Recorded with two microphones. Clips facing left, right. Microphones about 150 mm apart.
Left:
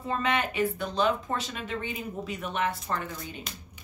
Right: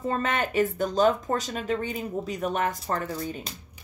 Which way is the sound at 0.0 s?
45° right (ahead or behind).